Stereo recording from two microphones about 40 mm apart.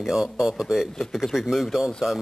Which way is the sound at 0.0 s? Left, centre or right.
Centre.